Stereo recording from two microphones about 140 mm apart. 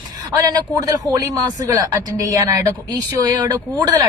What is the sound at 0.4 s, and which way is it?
Speech, 25° right (ahead or behind).